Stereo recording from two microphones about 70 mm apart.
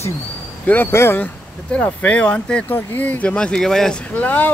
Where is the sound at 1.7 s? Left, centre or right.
Centre.